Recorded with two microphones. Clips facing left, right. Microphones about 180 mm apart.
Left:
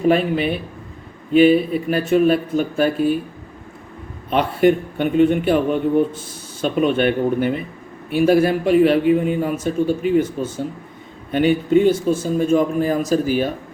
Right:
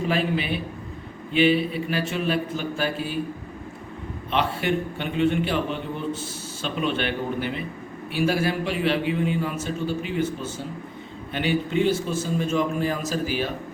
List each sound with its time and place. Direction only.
0.1 s speech: 40° left (ahead or behind)
4.3 s speech: 45° left (ahead or behind)
11.3 s speech: 45° left (ahead or behind)